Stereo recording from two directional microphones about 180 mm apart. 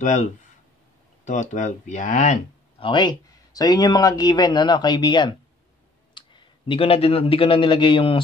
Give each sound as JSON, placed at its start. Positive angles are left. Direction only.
{"t": 0.0, "sound": "speech", "side_deg": 40}
{"t": 2.8, "sound": "speech", "side_deg": 25}